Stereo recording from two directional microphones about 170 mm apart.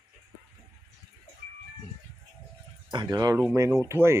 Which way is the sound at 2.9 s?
25° right (ahead or behind).